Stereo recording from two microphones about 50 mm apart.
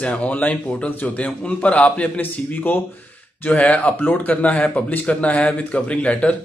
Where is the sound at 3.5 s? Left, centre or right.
Left.